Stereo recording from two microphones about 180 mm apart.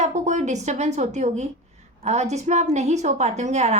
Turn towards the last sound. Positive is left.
turn(degrees=-40)  # may be behind; listen again after turning